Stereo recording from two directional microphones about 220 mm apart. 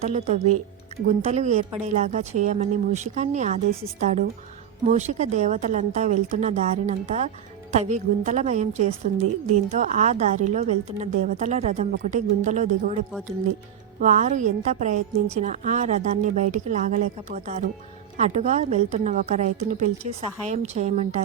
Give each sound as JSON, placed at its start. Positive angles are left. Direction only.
{"t": 0.0, "sound": "a woman's voice", "side_deg": -30}